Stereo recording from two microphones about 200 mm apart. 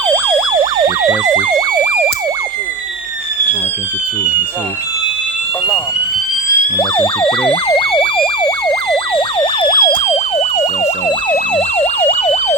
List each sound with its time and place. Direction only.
1.0 s emergency vehicle: 15° right (ahead or behind)
6.7 s emergency vehicle: 25° left (ahead or behind)